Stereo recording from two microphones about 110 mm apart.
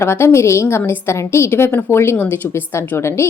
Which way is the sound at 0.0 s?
25° left (ahead or behind).